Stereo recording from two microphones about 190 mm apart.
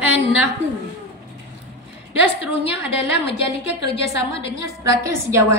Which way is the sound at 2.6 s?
30° left (ahead or behind).